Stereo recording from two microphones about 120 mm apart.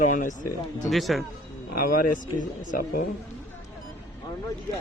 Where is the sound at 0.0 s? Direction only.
90° left.